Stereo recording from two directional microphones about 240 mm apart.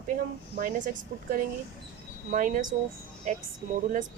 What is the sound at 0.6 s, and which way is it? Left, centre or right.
Speech, right.